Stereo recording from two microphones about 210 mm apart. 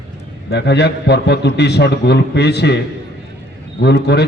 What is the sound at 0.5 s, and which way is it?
A man's voice, 50° left (ahead or behind).